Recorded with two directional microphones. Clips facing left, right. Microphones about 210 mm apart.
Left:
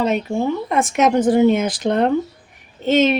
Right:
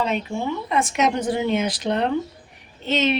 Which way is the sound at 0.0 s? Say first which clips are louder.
Left 5 dB; 45° left (ahead or behind).